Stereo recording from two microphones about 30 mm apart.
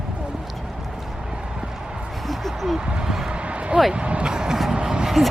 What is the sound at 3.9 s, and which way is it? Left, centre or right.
Speech, right.